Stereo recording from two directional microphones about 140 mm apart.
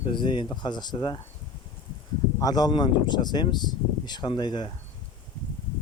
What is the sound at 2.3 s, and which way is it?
Speech, 30° left (ahead or behind).